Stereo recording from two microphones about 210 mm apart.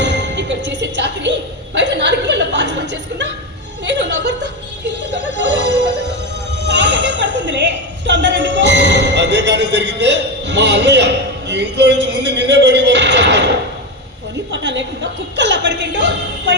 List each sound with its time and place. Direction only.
0.0 s music: 55° right (ahead or behind)
3.8 s chuckle: 55° right (ahead or behind)
5.4 s music: 55° right (ahead or behind)
6.7 s a sound: 55° right (ahead or behind)
14.5 s a woman's voice: 60° right (ahead or behind)